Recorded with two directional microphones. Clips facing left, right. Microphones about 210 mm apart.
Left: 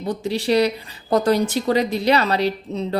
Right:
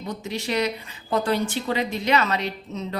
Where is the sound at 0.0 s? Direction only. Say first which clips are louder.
Left 7 dB; 35° left (ahead or behind).